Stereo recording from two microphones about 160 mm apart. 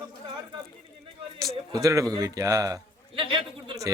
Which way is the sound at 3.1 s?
35° right (ahead or behind).